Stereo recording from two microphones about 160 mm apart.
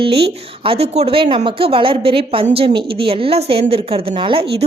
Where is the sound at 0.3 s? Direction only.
35° right (ahead or behind).